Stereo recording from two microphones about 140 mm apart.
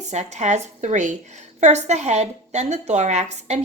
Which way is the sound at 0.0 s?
55° right (ahead or behind).